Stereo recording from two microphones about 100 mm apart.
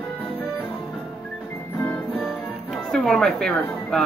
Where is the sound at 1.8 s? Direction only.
15° left (ahead or behind).